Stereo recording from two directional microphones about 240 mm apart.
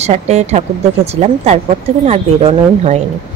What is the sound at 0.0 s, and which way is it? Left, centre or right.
A woman's voice, right.